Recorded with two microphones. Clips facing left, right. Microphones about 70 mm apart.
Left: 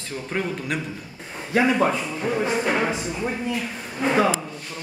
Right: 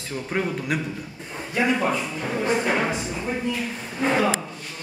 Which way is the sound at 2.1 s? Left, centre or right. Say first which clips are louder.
Left 3 dB; centre.